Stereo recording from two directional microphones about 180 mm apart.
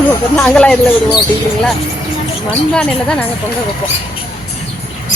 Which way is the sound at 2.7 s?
5° left (ahead or behind).